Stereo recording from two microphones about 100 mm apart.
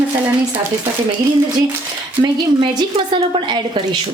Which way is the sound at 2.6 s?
55° right (ahead or behind).